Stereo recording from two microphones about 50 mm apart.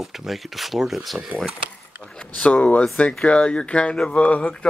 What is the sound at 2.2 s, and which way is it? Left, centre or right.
Speech, left.